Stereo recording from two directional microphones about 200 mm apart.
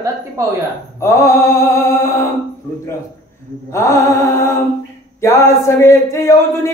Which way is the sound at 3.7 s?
15° left (ahead or behind).